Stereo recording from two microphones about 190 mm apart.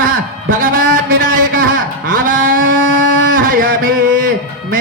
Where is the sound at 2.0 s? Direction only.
45° right (ahead or behind).